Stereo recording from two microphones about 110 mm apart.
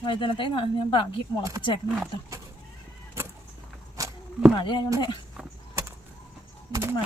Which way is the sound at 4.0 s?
30° right (ahead or behind).